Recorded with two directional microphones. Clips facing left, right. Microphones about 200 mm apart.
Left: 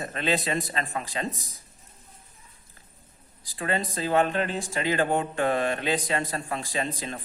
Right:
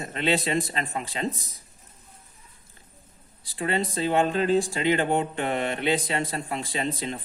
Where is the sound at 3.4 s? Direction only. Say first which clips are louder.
Right 2 dB; 25° right (ahead or behind).